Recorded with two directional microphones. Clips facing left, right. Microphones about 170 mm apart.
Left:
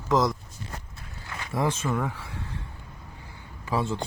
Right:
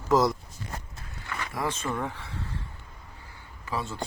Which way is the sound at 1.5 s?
20° left (ahead or behind).